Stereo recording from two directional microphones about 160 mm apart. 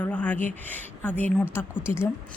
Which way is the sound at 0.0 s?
10° left (ahead or behind).